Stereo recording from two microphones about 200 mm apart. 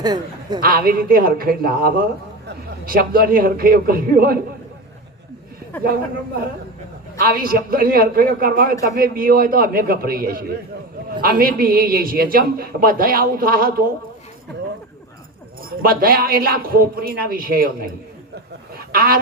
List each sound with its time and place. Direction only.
0.0 s a man's voice: 20° right (ahead or behind)
0.6 s a man's voice: 50° right (ahead or behind)
7.2 s a man's voice: 45° right (ahead or behind)
15.8 s a man's voice: 45° right (ahead or behind)
18.8 s a sound: 50° right (ahead or behind)